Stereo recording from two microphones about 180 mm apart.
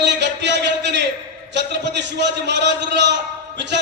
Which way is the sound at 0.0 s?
75° right (ahead or behind).